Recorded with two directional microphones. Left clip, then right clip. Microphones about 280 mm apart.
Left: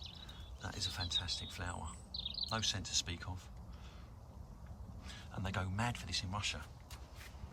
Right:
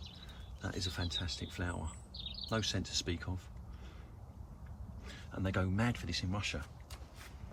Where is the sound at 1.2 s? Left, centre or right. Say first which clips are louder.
Right 1 dB; centre.